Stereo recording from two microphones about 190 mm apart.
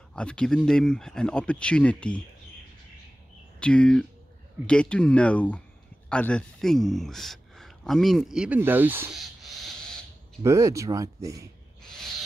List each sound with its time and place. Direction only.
0.1 s speech: 5° left (ahead or behind)
3.5 s a man's voice: 5° left (ahead or behind); by 9.1 s 10° right (ahead or behind)
9.1 s a sound: centre (ahead or behind)
10.4 s speech: 15° right (ahead or behind)